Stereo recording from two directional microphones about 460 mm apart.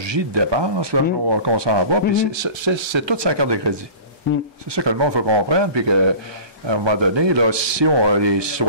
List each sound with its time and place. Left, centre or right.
0.0 s speech: right
4.7 s speech: right